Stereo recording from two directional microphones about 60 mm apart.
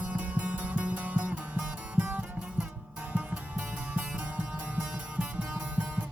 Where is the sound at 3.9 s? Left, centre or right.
Right.